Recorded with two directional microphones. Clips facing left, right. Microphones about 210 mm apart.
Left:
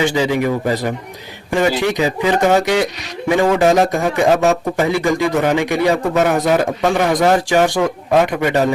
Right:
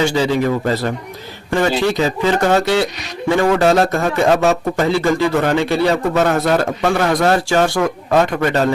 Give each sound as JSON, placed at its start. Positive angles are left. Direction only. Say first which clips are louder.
{"t": 0.0, "sound": "speech", "louder": "even", "side_deg": 15}